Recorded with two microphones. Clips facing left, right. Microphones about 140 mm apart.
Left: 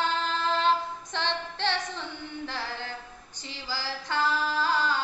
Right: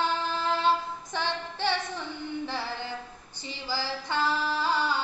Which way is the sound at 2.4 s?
15° right (ahead or behind).